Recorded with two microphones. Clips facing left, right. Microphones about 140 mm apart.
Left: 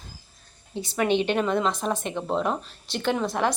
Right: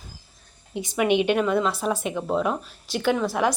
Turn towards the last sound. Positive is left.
turn(degrees=-10)  # may be behind; listen again after turning